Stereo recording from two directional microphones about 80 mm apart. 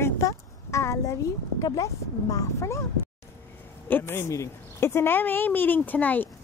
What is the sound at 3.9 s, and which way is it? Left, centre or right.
A woman's voice, left.